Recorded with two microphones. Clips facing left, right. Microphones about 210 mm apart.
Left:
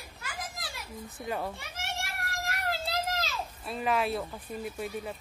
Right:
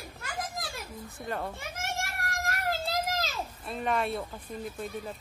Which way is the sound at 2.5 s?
45° right (ahead or behind).